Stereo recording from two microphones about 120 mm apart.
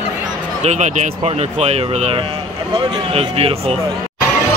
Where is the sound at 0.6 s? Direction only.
75° right (ahead or behind); by 3.8 s 55° right (ahead or behind).